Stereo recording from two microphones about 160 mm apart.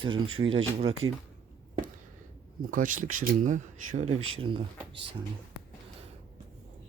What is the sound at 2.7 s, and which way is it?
Speech, 55° right (ahead or behind).